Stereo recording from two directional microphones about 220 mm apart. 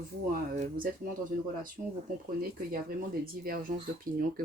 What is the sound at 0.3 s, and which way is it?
Speech, 40° right (ahead or behind).